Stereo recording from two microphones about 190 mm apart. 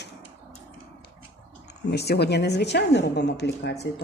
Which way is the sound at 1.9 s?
60° left (ahead or behind).